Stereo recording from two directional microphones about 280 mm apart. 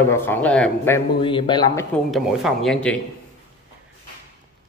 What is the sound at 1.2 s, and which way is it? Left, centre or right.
Speech, centre.